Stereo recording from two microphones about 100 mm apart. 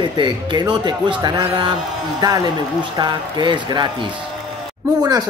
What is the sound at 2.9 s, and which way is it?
Speech, 50° right (ahead or behind).